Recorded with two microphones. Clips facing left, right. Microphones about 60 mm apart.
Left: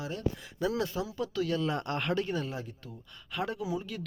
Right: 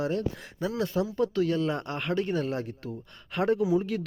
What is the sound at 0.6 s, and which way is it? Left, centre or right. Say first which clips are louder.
Speech: left 1 dB; right.